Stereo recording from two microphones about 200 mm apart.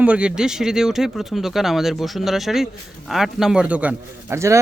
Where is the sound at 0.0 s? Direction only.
5° right (ahead or behind).